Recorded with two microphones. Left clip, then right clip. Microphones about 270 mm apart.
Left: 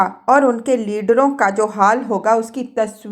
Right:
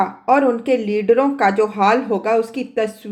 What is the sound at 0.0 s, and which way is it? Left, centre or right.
Speech, centre.